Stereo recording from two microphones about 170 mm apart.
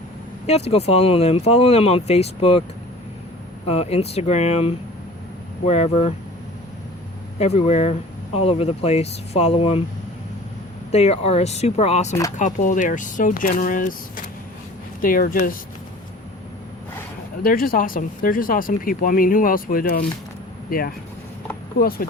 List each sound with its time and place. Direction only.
0.4 s speech: 40° left (ahead or behind)
3.7 s speech: 35° left (ahead or behind)
7.3 s speech: 40° left (ahead or behind)
10.9 s speech: 40° left (ahead or behind)
15.0 s speech: 55° left (ahead or behind)
17.4 s speech: 55° left (ahead or behind)